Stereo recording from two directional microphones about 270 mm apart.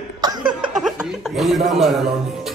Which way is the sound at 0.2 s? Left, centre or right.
Centre.